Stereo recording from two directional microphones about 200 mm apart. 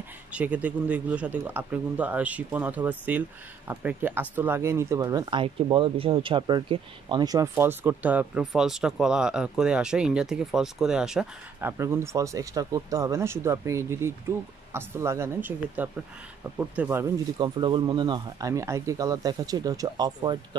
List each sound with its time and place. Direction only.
0.3 s speech: 5° right (ahead or behind)
11.8 s speech: 15° right (ahead or behind)
17.4 s speech: 25° right (ahead or behind)